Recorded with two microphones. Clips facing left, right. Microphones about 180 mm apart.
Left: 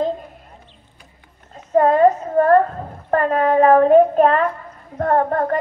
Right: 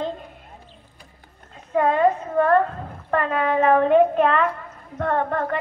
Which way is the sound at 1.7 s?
40° left (ahead or behind).